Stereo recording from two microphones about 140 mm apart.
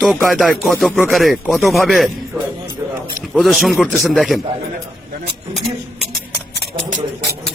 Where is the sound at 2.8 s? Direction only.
25° right (ahead or behind).